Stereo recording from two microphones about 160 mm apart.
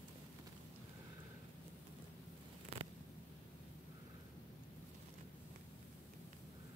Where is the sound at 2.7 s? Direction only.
40° right (ahead or behind).